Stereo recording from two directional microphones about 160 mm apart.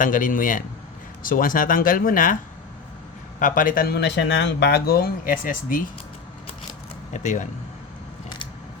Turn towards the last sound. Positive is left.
turn(degrees=50)  # may be behind; listen again after turning